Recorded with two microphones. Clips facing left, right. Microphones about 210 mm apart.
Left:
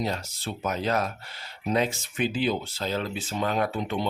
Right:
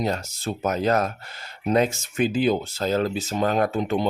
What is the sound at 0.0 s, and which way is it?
Speech, 45° right (ahead or behind).